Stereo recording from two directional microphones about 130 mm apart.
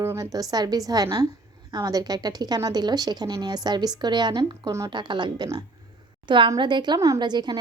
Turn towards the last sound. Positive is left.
turn(degrees=-35)  # may be behind; listen again after turning